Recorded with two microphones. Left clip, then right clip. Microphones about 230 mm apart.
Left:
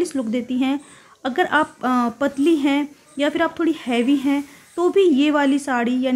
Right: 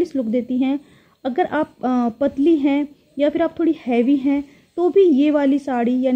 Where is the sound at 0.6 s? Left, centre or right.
Centre.